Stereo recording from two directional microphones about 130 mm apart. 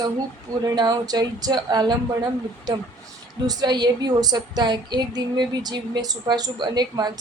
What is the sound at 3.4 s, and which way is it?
A woman's voice, 30° right (ahead or behind).